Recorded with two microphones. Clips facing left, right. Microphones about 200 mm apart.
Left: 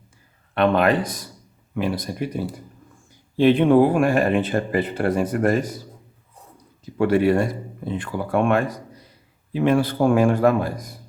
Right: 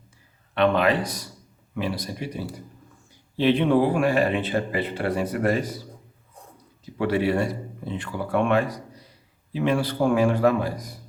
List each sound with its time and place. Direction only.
0.5 s speech: 50° left (ahead or behind)
7.0 s speech: 50° left (ahead or behind)